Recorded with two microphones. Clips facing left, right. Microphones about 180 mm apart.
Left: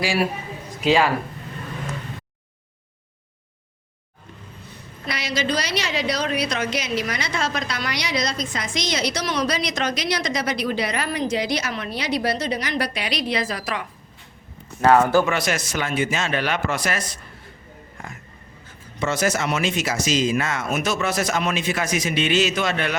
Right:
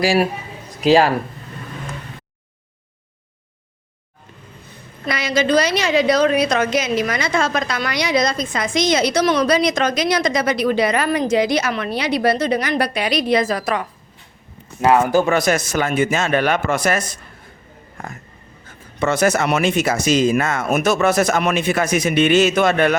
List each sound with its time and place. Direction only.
0.0 s speech: 40° right (ahead or behind)
5.0 s a woman's voice: 50° right (ahead or behind)
14.8 s speech: 10° right (ahead or behind)
15.3 s a woman's voice: 45° right (ahead or behind)
18.9 s speech: 60° right (ahead or behind)